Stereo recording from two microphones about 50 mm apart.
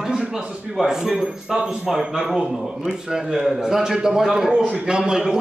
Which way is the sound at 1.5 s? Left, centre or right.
Centre.